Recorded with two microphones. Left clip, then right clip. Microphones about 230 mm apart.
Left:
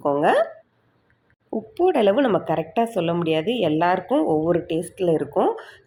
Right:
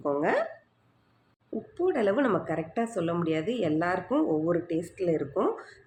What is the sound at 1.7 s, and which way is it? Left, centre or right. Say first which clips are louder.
Speech: left 8 dB; centre.